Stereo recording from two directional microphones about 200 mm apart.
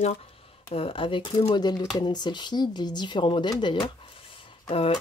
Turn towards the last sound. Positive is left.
turn(degrees=30)  # may be behind; listen again after turning